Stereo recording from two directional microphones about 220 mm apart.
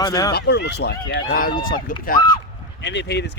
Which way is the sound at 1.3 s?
40° left (ahead or behind).